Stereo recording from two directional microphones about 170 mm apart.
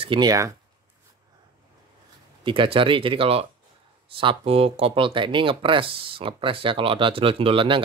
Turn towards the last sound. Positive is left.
turn(degrees=-30)  # may be behind; listen again after turning